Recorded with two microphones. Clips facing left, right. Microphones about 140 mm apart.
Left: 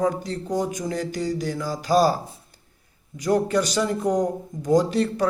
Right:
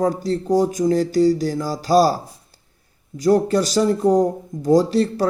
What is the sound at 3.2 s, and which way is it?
Speech, 35° right (ahead or behind).